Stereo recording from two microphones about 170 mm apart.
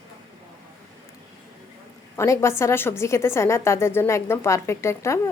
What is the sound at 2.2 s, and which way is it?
A woman's voice, 15° left (ahead or behind).